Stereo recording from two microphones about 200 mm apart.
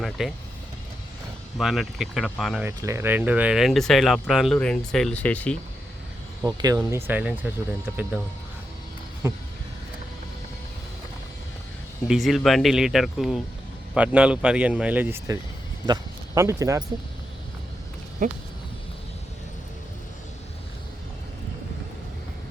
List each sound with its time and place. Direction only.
0.0 s speech: centre (ahead or behind)
1.5 s speech: centre (ahead or behind)
2.6 s speech: 10° right (ahead or behind); by 5.5 s 5° left (ahead or behind)
6.4 s speech: 20° right (ahead or behind)
12.0 s speech: centre (ahead or behind)
18.2 s speech: 40° right (ahead or behind)